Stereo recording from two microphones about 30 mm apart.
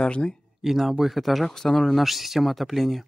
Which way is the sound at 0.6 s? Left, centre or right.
Centre.